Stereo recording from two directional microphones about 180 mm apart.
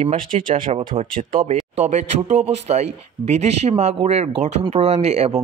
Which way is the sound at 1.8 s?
40° right (ahead or behind).